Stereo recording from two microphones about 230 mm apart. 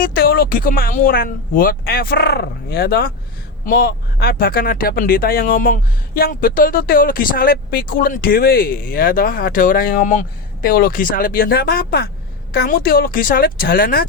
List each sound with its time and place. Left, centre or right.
0.0 s speech: left